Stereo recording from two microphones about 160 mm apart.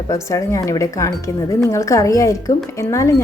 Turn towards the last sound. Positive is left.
turn(degrees=20)  # may be behind; listen again after turning